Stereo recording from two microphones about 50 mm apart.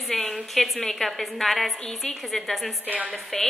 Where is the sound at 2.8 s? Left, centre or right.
Right.